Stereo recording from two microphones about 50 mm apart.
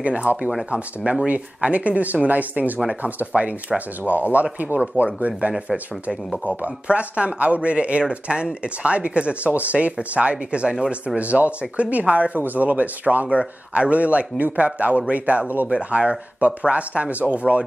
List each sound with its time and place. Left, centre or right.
0.0 s speech: right